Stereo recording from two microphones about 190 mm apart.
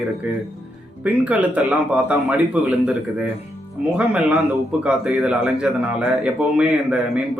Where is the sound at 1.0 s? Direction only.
5° right (ahead or behind).